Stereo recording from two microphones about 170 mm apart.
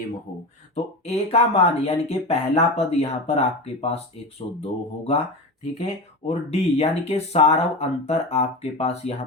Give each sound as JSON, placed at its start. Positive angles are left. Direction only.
{"t": 1.0, "sound": "speech", "side_deg": 40}